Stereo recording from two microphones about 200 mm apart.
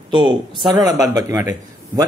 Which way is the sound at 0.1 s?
25° right (ahead or behind).